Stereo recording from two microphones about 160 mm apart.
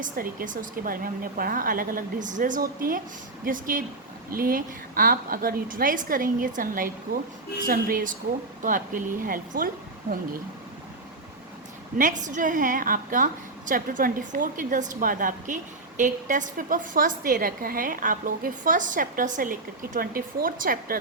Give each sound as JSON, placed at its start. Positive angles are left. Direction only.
{"t": 0.0, "sound": "a woman's voice", "side_deg": -60}
{"t": 11.9, "sound": "a woman's voice", "side_deg": -50}